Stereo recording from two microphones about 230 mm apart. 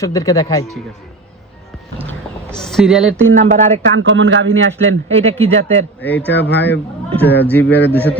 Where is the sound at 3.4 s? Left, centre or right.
Right.